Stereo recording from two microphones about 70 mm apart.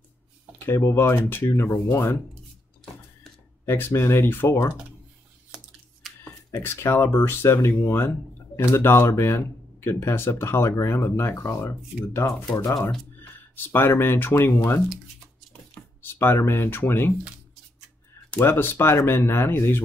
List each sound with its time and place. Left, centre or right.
0.7 s speech: left
3.6 s speech: left
6.0 s a sound: centre
6.5 s speech: left
16.0 s speech: left
18.4 s speech: left